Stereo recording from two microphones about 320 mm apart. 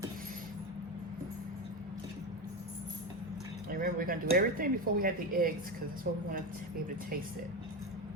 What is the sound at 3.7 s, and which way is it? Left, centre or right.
Speech, right.